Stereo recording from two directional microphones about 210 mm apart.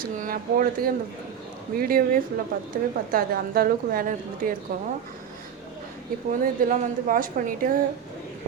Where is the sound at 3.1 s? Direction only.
45° right (ahead or behind).